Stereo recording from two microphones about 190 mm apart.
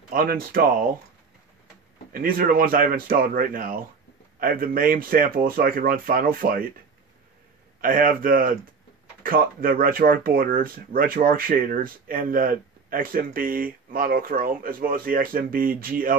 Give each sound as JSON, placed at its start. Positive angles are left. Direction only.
{"t": 0.1, "sound": "speech", "side_deg": -50}
{"t": 2.1, "sound": "speech", "side_deg": -50}
{"t": 7.8, "sound": "speech", "side_deg": -45}